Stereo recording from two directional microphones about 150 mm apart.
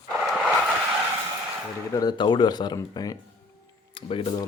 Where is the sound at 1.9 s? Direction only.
25° left (ahead or behind).